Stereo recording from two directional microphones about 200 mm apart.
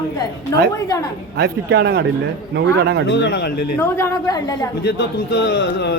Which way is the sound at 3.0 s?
60° left (ahead or behind).